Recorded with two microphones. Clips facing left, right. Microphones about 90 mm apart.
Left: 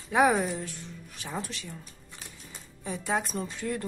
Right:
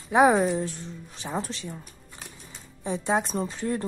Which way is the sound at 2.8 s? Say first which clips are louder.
Right 5 dB; 25° right (ahead or behind).